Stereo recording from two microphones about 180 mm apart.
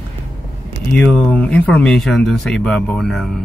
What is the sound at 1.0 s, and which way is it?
Speech, 5° left (ahead or behind).